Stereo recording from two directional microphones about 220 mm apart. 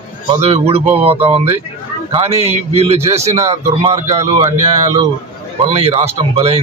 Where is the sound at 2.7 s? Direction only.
30° right (ahead or behind).